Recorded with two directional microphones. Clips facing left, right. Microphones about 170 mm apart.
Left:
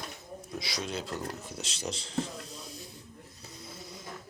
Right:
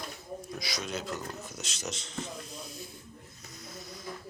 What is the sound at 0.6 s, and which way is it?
Speech, 30° left (ahead or behind).